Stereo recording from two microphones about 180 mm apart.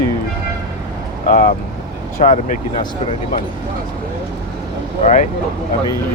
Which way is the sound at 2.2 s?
45° left (ahead or behind).